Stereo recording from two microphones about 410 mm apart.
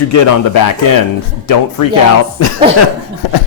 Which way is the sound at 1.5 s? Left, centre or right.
Left.